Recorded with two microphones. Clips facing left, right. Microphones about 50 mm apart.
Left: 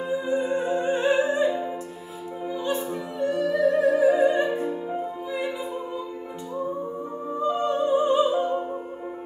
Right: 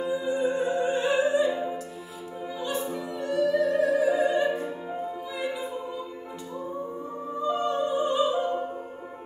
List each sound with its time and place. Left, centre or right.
0.0 s music: left
0.9 s opera: left
2.6 s opera: left
3.2 s music: left
4.6 s music: centre
5.3 s music: left
7.4 s music: left